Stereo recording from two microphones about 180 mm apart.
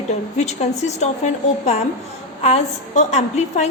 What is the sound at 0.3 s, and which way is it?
A woman's voice, 40° left (ahead or behind).